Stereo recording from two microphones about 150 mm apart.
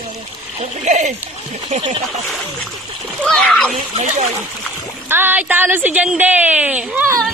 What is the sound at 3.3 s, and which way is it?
Speech, 5° left (ahead or behind).